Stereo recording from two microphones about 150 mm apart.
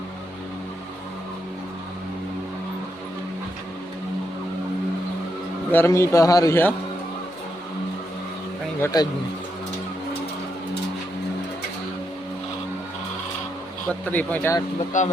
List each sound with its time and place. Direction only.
5.7 s a man's voice: 15° left (ahead or behind)
8.8 s a man's voice: 25° left (ahead or behind)
13.8 s speech: 10° left (ahead or behind)
14.9 s speech: 55° left (ahead or behind)